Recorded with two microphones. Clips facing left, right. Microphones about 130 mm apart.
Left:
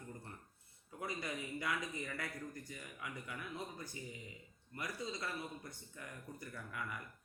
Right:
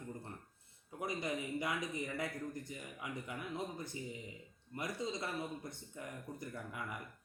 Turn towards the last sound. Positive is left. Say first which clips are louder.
# right 2 dB
turn(degrees=-20)  # may be behind; listen again after turning